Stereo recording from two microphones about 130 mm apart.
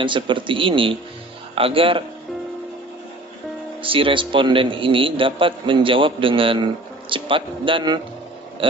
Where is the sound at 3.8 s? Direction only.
40° right (ahead or behind).